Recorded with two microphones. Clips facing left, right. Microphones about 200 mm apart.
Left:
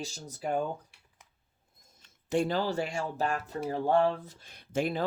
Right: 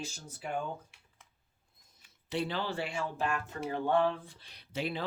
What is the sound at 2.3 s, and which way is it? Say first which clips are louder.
Speech: left 6 dB; 45° left (ahead or behind).